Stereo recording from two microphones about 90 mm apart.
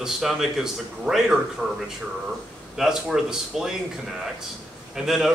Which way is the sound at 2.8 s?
5° right (ahead or behind).